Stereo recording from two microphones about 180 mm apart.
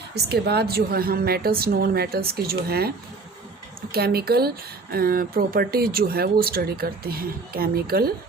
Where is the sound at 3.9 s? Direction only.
60° right (ahead or behind).